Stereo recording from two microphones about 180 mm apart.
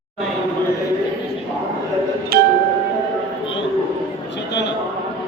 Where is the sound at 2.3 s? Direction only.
55° right (ahead or behind).